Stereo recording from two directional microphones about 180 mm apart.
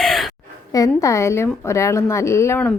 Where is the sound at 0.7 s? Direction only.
20° left (ahead or behind).